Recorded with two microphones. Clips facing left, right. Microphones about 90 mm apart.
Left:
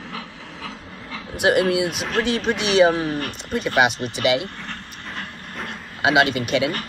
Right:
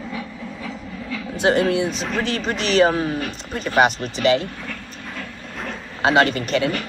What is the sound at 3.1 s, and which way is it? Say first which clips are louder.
Speech: even; 50° left (ahead or behind).